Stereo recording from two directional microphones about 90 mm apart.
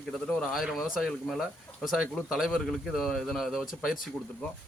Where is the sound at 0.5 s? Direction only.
5° right (ahead or behind).